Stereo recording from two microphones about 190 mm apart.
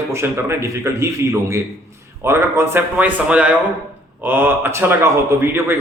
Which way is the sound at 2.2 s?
15° right (ahead or behind).